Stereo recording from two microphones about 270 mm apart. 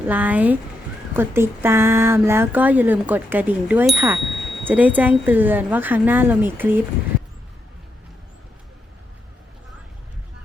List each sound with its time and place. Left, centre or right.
0.1 s speech: centre